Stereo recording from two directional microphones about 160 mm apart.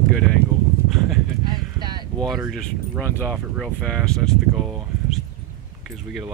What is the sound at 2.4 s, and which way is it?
Speech, 5° left (ahead or behind).